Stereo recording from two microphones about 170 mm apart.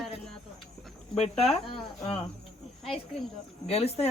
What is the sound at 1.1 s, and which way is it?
Speech, 35° left (ahead or behind).